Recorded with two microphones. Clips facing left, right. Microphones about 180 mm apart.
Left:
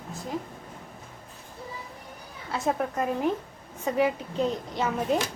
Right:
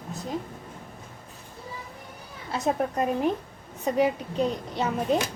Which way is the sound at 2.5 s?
20° right (ahead or behind).